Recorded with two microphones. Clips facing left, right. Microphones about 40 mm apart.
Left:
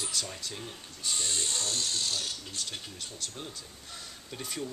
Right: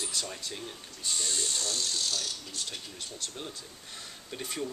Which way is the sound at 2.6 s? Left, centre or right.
Centre.